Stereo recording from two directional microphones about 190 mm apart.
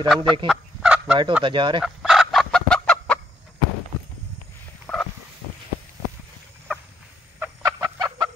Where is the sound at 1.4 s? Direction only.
25° right (ahead or behind).